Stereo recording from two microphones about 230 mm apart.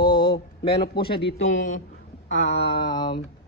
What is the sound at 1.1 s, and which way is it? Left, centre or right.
Speech, left.